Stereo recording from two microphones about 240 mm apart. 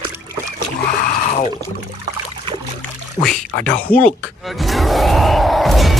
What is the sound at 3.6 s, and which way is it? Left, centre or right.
Speech, centre.